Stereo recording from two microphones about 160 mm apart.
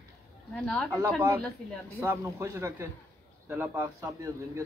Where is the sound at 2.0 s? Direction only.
15° right (ahead or behind).